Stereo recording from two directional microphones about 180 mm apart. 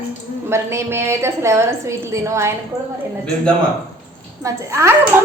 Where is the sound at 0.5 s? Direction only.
15° right (ahead or behind).